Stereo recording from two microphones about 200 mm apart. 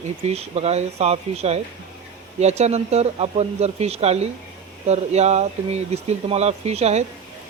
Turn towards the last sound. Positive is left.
turn(degrees=-35)  # may be behind; listen again after turning